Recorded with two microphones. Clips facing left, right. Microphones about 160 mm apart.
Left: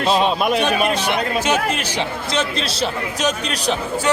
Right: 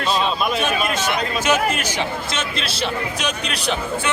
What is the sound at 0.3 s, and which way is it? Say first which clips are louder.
Speech: left 3 dB; 65° left (ahead or behind).